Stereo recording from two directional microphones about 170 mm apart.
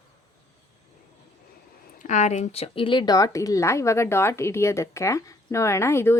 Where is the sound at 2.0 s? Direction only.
45° left (ahead or behind).